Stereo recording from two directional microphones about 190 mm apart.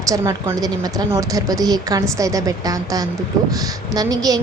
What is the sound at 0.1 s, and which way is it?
A woman's voice, 15° right (ahead or behind).